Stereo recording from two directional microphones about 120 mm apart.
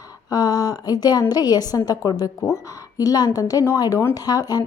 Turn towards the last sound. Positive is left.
turn(degrees=35)  # may be behind; listen again after turning